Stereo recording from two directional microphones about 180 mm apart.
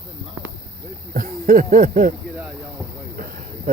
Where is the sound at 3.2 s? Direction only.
45° right (ahead or behind).